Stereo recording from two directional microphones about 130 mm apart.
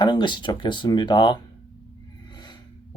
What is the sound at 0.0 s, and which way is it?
Speech, 35° left (ahead or behind).